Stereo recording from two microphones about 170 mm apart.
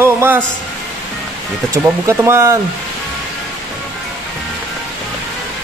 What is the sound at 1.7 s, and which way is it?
Speech, 15° right (ahead or behind).